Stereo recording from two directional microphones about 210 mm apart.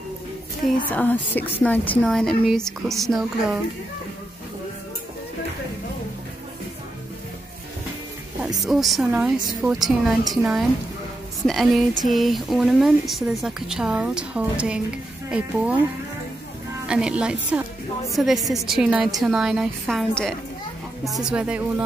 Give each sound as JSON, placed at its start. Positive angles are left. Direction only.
{"t": 0.8, "sound": "speech", "side_deg": 10}
{"t": 8.6, "sound": "speech", "side_deg": 0}
{"t": 16.8, "sound": "speech", "side_deg": -5}